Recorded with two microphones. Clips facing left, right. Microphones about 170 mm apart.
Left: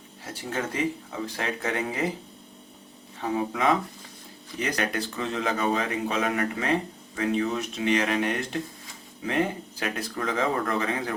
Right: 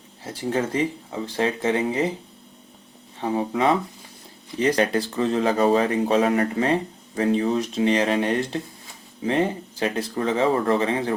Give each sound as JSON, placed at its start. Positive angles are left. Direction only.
{"t": 0.5, "sound": "speech", "side_deg": -30}
{"t": 3.2, "sound": "speech", "side_deg": -30}